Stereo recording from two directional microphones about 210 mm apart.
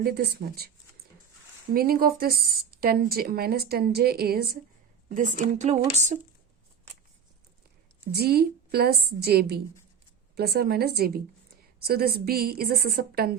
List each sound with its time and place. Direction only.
0.0 s a woman's voice: 50° right (ahead or behind)
1.7 s a woman's voice: 45° right (ahead or behind)
8.1 s a woman's voice: 50° right (ahead or behind)